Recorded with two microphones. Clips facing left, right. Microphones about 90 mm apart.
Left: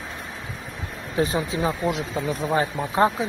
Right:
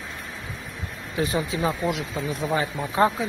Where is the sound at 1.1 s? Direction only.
35° left (ahead or behind).